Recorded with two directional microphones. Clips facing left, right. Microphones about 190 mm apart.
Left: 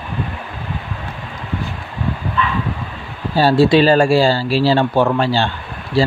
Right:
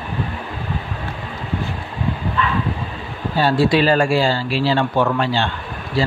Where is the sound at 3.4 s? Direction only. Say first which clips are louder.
Left 4 dB; 30° left (ahead or behind).